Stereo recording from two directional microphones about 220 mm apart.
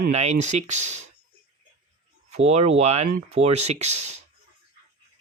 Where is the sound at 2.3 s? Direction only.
30° right (ahead or behind).